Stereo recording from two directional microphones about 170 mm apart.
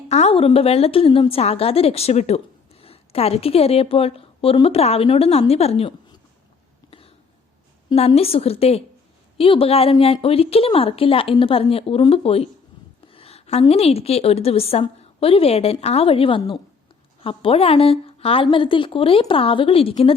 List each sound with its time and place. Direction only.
0.1 s a woman's voice: 40° left (ahead or behind)
7.9 s a woman's voice: 35° left (ahead or behind)